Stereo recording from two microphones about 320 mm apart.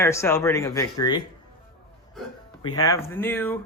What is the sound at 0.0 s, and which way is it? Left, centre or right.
Speech, centre.